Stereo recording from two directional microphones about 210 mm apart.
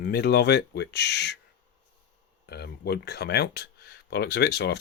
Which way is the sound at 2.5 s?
50° left (ahead or behind).